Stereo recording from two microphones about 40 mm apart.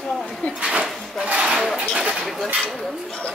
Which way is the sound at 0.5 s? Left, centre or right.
Right.